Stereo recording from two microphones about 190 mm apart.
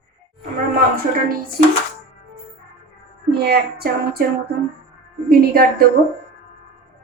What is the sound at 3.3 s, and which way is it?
Speech, 55° right (ahead or behind).